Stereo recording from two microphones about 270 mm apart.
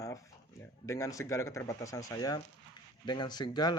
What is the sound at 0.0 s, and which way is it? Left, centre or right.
Speech, centre.